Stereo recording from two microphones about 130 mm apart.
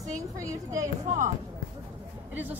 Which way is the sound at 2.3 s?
15° right (ahead or behind).